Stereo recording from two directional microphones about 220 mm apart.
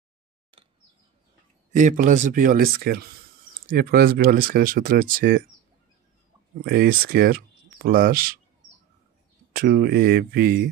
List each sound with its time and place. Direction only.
0.5 s a sound: 25° right (ahead or behind)
1.7 s speech: 35° right (ahead or behind)
6.6 s speech: 45° right (ahead or behind)
9.6 s speech: 45° right (ahead or behind)